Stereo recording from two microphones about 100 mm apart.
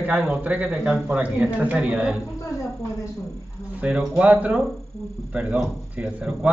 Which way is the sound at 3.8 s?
10° right (ahead or behind).